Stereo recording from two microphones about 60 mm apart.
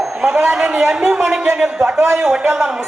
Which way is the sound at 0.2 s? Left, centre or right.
Centre.